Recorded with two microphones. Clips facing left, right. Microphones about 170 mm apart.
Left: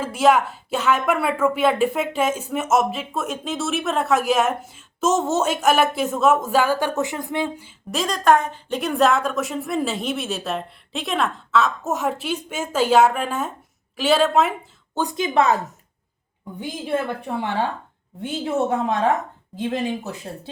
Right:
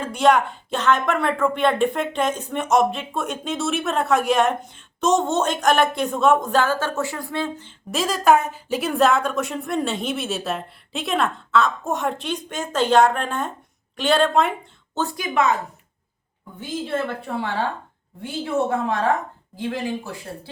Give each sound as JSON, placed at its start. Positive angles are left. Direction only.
{"t": 0.0, "sound": "speech", "side_deg": 5}
{"t": 7.9, "sound": "speech", "side_deg": 0}
{"t": 14.9, "sound": "a woman's voice", "side_deg": 20}
{"t": 16.6, "sound": "a woman's voice", "side_deg": 15}